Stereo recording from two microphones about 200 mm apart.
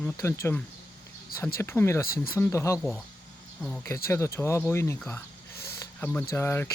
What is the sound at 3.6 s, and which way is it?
Speech, 5° left (ahead or behind).